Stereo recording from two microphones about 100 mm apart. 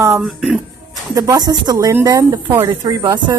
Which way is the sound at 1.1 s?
35° right (ahead or behind).